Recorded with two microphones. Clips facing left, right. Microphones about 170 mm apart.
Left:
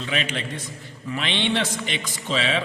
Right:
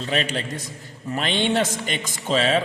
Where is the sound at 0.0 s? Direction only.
40° right (ahead or behind).